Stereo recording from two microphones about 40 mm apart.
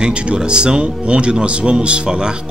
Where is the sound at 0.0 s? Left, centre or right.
Right.